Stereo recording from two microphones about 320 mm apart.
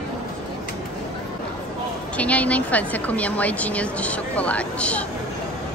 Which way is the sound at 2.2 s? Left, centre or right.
Centre.